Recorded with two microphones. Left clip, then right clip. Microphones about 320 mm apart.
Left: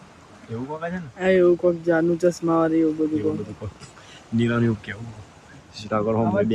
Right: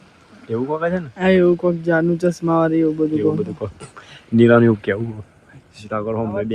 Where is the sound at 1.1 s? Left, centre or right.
Centre.